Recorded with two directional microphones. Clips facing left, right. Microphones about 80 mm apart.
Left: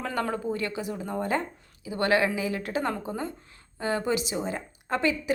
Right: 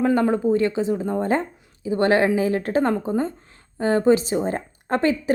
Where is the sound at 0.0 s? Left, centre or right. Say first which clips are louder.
Right 10 dB; right.